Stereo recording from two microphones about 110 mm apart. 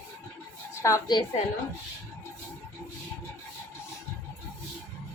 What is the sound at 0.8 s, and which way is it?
Speech, 30° left (ahead or behind).